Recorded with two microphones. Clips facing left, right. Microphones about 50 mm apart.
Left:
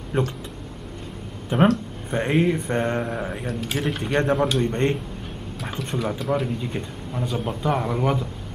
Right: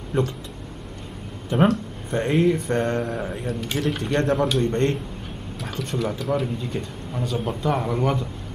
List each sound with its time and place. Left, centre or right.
0.1 s speech: centre
1.5 s speech: centre
5.9 s speech: centre